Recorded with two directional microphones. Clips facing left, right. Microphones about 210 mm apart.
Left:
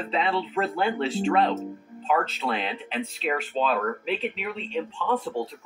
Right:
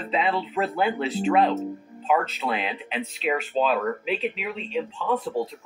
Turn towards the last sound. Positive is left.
turn(degrees=-5)  # may be behind; listen again after turning